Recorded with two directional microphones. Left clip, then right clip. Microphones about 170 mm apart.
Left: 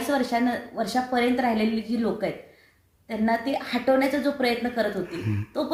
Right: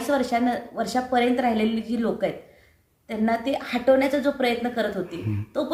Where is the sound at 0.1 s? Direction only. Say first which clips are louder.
Right 2 dB; 5° right (ahead or behind).